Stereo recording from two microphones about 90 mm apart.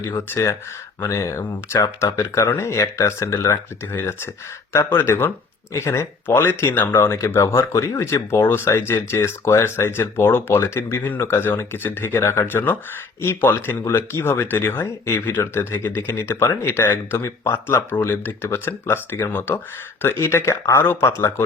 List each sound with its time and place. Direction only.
1.0 s speech: 35° left (ahead or behind)